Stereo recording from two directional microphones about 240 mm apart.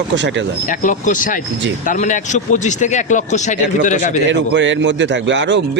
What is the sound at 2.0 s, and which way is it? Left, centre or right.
A man's voice, left.